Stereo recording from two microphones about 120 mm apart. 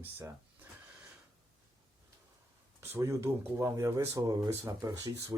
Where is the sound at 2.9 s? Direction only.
20° right (ahead or behind).